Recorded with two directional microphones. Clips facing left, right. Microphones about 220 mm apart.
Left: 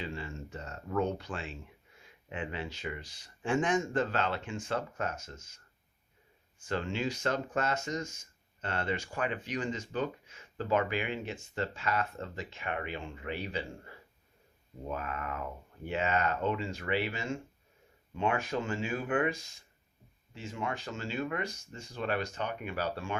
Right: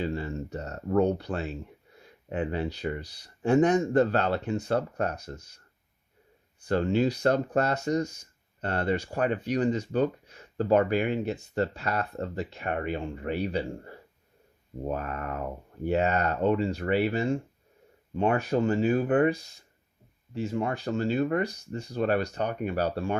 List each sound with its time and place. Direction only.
0.0 s speech: 40° right (ahead or behind)
6.7 s speech: 40° right (ahead or behind)